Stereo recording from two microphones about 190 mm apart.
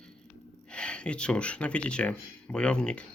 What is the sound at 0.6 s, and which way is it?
Speech, 5° left (ahead or behind).